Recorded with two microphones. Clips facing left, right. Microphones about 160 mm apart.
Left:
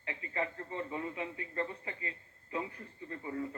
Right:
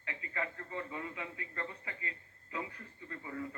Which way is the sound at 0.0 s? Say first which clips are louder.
Left 3 dB; 25° left (ahead or behind).